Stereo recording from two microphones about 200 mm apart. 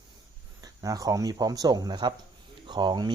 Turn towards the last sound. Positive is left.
turn(degrees=-20)  # may be behind; listen again after turning